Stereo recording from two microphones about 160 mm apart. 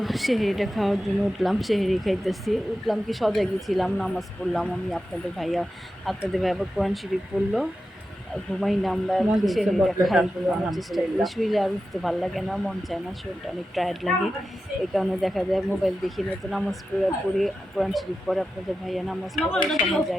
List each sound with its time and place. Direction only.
0.0 s a woman's voice: centre (ahead or behind)